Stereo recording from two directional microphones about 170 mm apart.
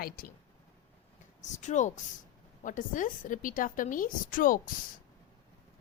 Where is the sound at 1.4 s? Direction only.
45° left (ahead or behind).